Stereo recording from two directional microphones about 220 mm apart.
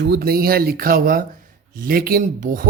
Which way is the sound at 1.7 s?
40° right (ahead or behind).